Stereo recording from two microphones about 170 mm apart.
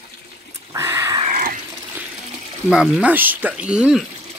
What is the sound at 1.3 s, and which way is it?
Water, 55° right (ahead or behind).